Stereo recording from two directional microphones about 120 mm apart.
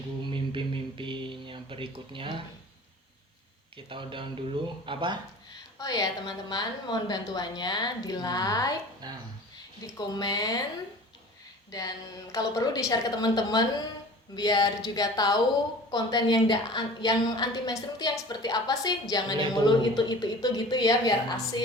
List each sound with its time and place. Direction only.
0.3 s speech: 45° right (ahead or behind)
3.8 s speech: 45° right (ahead or behind)
5.8 s a woman's voice: 35° left (ahead or behind)
9.0 s speech: 35° right (ahead or behind)
9.8 s a woman's voice: 35° left (ahead or behind)
11.7 s a woman's voice: 30° left (ahead or behind)